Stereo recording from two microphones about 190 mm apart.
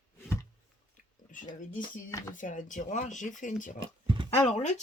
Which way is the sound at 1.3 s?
45° left (ahead or behind).